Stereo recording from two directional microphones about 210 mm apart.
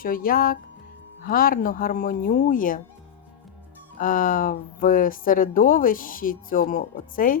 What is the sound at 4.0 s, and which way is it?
A woman's voice, 40° left (ahead or behind).